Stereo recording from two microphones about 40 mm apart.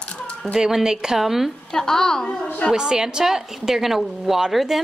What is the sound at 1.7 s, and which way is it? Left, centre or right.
Speech, centre.